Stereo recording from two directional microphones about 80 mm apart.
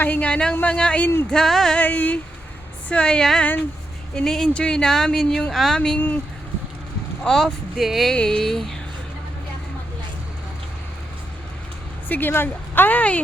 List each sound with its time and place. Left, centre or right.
0.0 s speech: centre
1.8 s speech: centre
7.3 s speech: centre
8.1 s speech: centre
12.0 s speech: left